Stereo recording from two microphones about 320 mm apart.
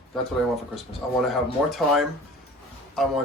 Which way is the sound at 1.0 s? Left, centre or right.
Centre.